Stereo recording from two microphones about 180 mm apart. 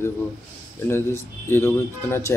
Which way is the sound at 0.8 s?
15° left (ahead or behind).